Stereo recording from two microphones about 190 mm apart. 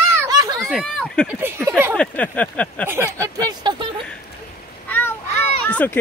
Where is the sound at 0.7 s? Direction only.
Centre (ahead or behind).